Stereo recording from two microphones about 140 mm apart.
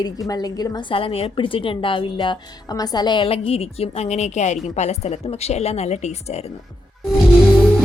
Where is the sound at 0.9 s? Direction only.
40° left (ahead or behind).